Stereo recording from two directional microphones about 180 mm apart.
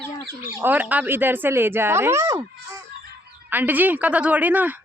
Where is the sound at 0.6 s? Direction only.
10° right (ahead or behind).